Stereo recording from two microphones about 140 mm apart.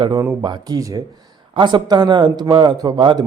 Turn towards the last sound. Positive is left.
turn(degrees=-35)  # may be behind; listen again after turning